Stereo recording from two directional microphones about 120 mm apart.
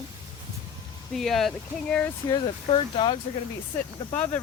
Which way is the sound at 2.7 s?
45° left (ahead or behind).